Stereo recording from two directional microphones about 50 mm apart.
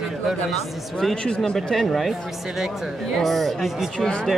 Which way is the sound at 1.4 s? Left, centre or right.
Centre.